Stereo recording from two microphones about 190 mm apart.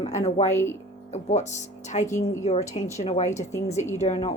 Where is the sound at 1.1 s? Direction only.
35° left (ahead or behind).